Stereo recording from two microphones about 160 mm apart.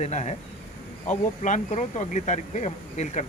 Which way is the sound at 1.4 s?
50° left (ahead or behind).